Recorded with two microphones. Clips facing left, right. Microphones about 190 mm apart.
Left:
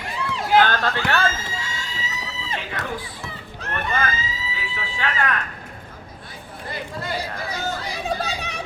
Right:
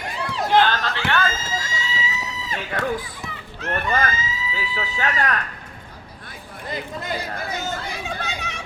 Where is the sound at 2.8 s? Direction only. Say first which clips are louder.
Right 10 dB; 30° right (ahead or behind).